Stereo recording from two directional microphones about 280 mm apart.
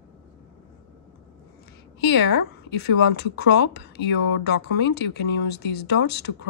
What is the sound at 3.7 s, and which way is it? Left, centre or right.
Speech, left.